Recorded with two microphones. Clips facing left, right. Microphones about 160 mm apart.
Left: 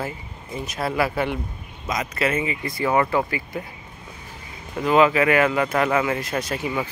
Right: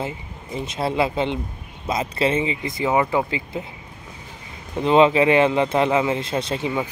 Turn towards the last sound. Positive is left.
turn(degrees=-20)  # may be behind; listen again after turning